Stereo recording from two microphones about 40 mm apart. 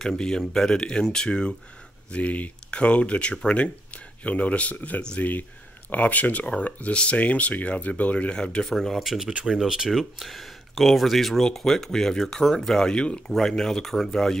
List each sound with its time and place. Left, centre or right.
0.0 s speech: centre
2.0 s speech: left
8.6 s speech: centre
12.9 s speech: left
13.4 s speech: centre